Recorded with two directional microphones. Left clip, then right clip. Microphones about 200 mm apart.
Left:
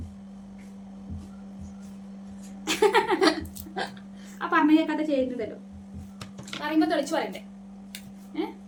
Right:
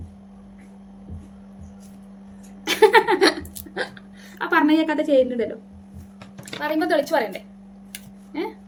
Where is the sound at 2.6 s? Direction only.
35° right (ahead or behind).